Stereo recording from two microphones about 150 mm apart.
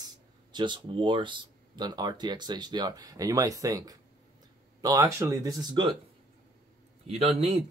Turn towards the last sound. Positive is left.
turn(degrees=-45)  # may be behind; listen again after turning